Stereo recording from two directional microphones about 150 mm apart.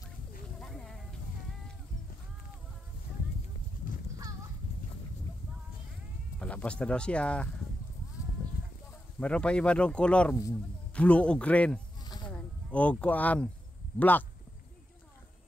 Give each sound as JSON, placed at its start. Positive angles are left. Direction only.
{"t": 0.6, "sound": "a sound", "side_deg": 5}
{"t": 6.4, "sound": "speech", "side_deg": 10}
{"t": 9.2, "sound": "speech", "side_deg": 5}
{"t": 12.0, "sound": "snake", "side_deg": 25}
{"t": 12.3, "sound": "speech", "side_deg": 10}